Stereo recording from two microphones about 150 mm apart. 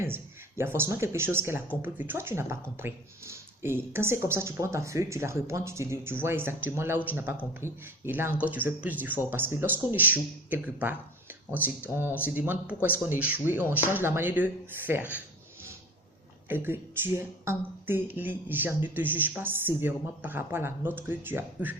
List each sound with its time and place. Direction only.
0.0 s speech: 15° right (ahead or behind)
16.5 s speech: 15° right (ahead or behind)